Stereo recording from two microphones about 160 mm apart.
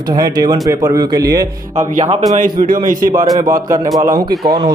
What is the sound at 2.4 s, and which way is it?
Speech, 60° right (ahead or behind).